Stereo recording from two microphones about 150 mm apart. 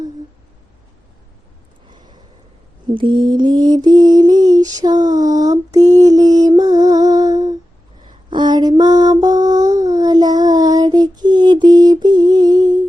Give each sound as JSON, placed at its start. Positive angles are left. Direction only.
{"t": 2.9, "sound": "mantra", "side_deg": -30}
{"t": 8.0, "sound": "a sound", "side_deg": -30}
{"t": 8.8, "sound": "child singing", "side_deg": -25}